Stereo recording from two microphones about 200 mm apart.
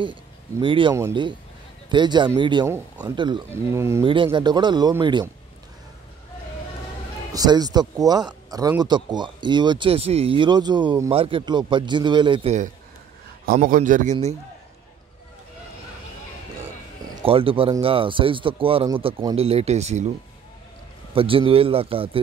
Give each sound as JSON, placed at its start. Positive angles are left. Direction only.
{"t": 0.0, "sound": "speech", "side_deg": -25}
{"t": 2.6, "sound": "speech", "side_deg": -10}
{"t": 3.2, "sound": "speech", "side_deg": -20}
{"t": 4.0, "sound": "speech", "side_deg": -25}
{"t": 7.3, "sound": "speech", "side_deg": -20}
{"t": 13.5, "sound": "a man's voice", "side_deg": -40}
{"t": 17.1, "sound": "speech", "side_deg": -25}
{"t": 21.1, "sound": "speech", "side_deg": -25}